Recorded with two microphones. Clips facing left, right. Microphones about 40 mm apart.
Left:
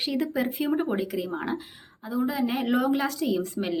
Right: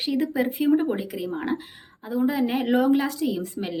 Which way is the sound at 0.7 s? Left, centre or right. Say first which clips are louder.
Right 4 dB; centre.